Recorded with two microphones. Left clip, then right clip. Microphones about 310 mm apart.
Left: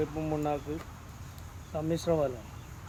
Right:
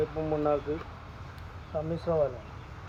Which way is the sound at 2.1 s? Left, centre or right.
Left.